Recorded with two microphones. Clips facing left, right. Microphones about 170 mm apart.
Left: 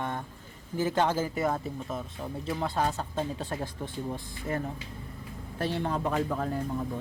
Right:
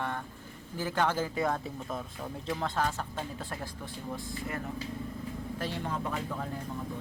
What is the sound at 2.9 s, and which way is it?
Speech, 25° left (ahead or behind).